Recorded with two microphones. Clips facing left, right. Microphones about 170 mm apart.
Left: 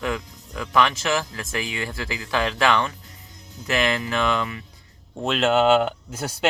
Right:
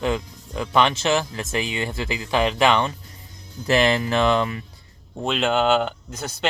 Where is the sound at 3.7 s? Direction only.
35° right (ahead or behind).